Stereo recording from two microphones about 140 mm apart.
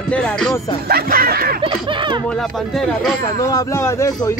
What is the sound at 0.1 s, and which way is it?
Speech, 10° left (ahead or behind).